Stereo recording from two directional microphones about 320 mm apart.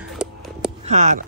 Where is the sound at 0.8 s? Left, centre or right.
Right.